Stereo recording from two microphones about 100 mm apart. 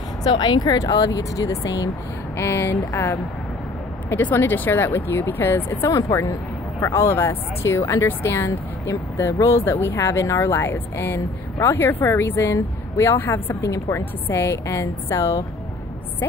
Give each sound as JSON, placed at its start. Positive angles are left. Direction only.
{"t": 0.2, "sound": "speech", "side_deg": 40}
{"t": 2.3, "sound": "speech", "side_deg": 25}
{"t": 5.9, "sound": "speech", "side_deg": 35}